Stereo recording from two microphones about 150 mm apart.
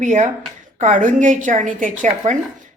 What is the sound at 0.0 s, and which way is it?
A woman's voice, 55° right (ahead or behind).